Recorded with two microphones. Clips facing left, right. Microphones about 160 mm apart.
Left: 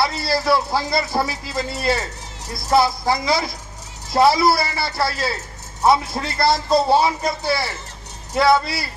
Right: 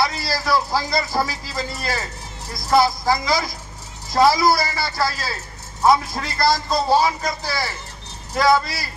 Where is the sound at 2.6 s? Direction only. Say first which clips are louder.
Even; 25° left (ahead or behind).